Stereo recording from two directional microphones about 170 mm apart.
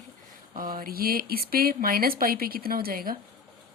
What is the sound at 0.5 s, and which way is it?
A woman's voice, 55° right (ahead or behind).